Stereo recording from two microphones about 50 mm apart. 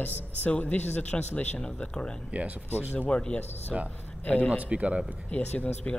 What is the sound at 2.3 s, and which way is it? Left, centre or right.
Speech, right.